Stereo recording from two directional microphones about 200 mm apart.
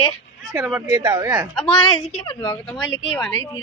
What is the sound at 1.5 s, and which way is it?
Speech, centre (ahead or behind).